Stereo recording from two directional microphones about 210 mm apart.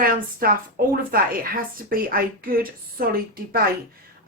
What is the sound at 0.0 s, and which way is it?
Speech, 45° right (ahead or behind).